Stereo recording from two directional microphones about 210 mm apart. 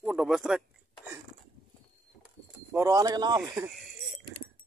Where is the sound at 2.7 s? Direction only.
15° right (ahead or behind).